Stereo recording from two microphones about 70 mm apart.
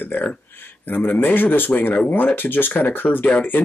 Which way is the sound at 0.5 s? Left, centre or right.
Left.